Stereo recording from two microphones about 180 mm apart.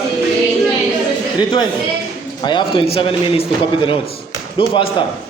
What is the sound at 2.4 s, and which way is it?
A man's voice, 25° left (ahead or behind).